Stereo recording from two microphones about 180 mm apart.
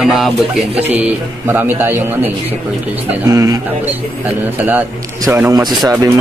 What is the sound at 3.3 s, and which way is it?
Speech, 20° right (ahead or behind).